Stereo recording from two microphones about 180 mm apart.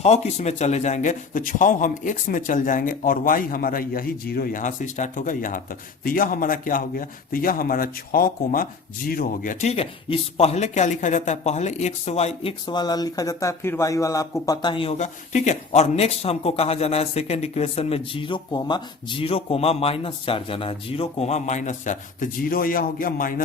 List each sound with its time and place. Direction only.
0.0 s a man's voice: 40° left (ahead or behind)